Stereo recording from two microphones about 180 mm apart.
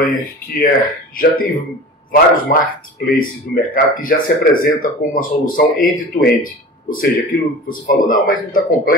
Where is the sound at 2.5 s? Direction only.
50° left (ahead or behind).